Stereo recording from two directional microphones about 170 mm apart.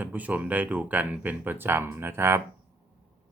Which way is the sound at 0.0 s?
10° right (ahead or behind).